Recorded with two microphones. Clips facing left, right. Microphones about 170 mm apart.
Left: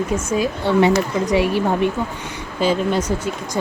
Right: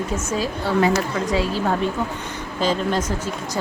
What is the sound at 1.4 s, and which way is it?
Speech, 65° left (ahead or behind).